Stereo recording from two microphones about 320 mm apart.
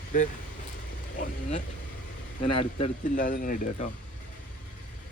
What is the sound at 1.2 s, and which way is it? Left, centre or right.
Speech, left.